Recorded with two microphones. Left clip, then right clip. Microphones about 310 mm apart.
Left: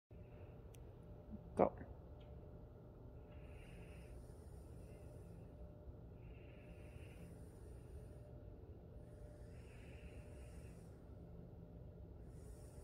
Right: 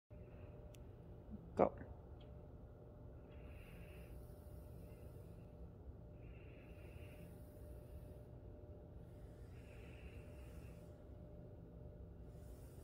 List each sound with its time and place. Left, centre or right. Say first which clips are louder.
1.5 s speech: even; centre